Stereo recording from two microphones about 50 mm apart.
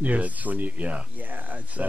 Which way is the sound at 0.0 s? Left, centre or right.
Right.